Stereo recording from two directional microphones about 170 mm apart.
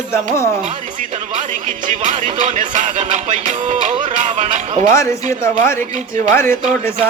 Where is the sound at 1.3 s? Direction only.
45° right (ahead or behind).